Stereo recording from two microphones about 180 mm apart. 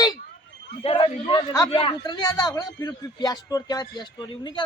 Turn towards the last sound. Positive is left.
turn(degrees=25)  # may be behind; listen again after turning